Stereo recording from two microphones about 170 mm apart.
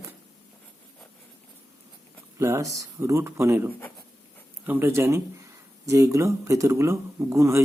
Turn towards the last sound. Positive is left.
turn(degrees=-15)  # may be behind; listen again after turning